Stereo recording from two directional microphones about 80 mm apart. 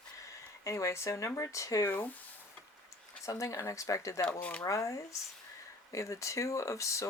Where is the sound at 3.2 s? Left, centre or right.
Left.